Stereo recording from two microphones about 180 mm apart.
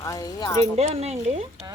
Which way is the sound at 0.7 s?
35° right (ahead or behind).